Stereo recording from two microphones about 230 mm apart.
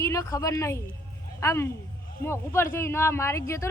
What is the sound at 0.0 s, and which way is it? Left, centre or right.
Speech, centre.